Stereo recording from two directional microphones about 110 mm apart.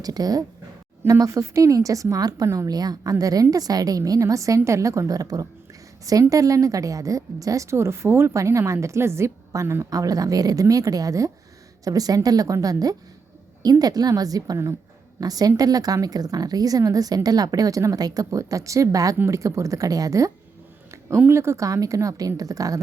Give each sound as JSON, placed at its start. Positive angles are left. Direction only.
{"t": 0.0, "sound": "a woman's voice", "side_deg": -35}